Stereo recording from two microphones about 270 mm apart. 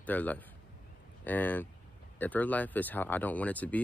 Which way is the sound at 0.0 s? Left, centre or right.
Centre.